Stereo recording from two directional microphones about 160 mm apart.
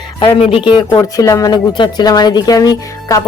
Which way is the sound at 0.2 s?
30° left (ahead or behind).